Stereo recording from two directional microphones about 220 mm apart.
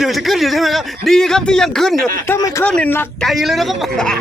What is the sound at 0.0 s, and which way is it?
Speech, centre (ahead or behind).